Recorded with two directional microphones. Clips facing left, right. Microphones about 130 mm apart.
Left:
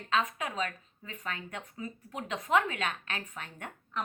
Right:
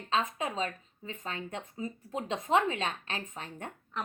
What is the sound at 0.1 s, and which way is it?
A woman's voice, 30° right (ahead or behind).